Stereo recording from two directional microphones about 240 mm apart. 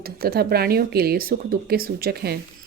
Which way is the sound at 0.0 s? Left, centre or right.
Right.